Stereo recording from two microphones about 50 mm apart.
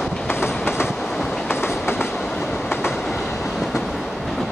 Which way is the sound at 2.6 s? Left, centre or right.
Left.